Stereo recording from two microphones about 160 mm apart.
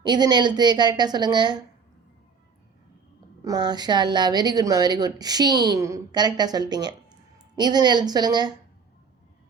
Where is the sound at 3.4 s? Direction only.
25° right (ahead or behind).